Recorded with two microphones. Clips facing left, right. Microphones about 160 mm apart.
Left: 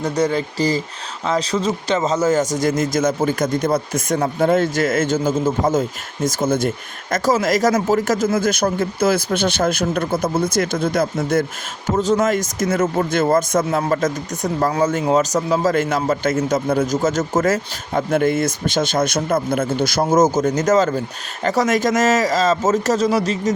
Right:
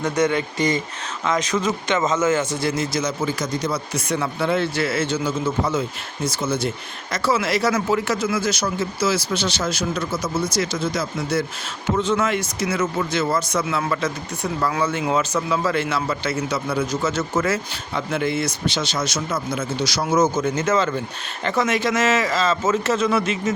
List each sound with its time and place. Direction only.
0.0 s a man's voice: 35° left (ahead or behind); by 11.4 s 50° left (ahead or behind)
11.9 s a man's voice: 40° left (ahead or behind)